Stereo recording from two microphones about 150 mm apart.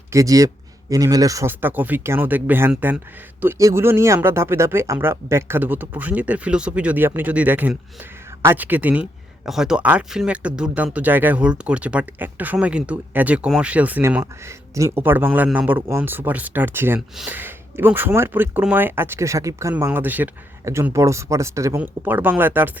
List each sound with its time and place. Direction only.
0.1 s speech: 20° right (ahead or behind)
14.4 s speech: 20° right (ahead or behind)